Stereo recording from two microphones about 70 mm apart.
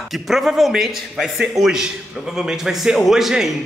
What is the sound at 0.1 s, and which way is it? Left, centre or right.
A man's voice, centre.